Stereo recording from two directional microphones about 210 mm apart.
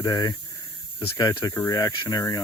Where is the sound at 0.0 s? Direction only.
20° left (ahead or behind).